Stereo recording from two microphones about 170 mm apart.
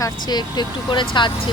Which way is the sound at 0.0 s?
25° left (ahead or behind).